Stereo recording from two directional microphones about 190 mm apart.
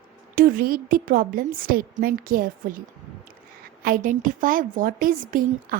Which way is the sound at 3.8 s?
45° right (ahead or behind).